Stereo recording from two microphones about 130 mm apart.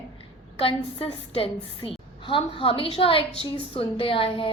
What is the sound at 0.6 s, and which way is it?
A woman's voice, 45° left (ahead or behind).